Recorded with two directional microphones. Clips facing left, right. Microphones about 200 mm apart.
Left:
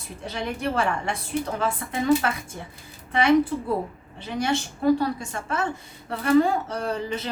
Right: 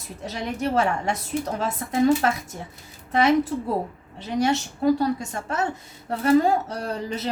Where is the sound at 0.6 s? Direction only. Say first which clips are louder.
Right 4 dB; 40° right (ahead or behind).